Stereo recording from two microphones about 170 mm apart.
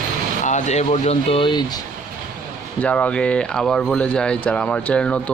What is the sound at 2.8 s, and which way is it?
Speech, 5° left (ahead or behind).